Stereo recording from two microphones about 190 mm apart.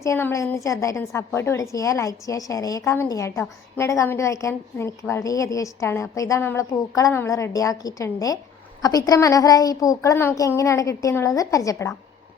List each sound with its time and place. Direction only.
0.0 s a woman's voice: 15° left (ahead or behind)